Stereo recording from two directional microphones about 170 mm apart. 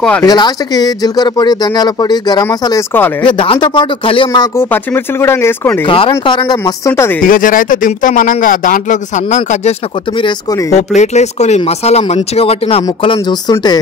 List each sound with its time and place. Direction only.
0.2 s speech: 25° left (ahead or behind)
4.6 s speech: 15° left (ahead or behind)
5.9 s speech: 30° left (ahead or behind)
7.2 s speech: 55° left (ahead or behind)
9.3 s speech: 40° left (ahead or behind)